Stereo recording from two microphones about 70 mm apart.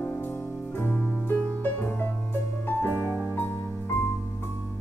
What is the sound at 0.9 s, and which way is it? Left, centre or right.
Music, centre.